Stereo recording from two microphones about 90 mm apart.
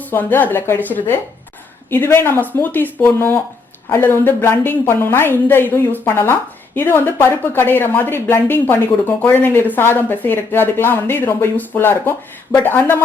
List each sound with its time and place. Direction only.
0.0 s speech: 20° left (ahead or behind)